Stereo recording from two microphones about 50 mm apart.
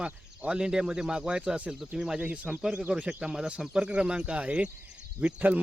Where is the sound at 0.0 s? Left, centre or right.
Right.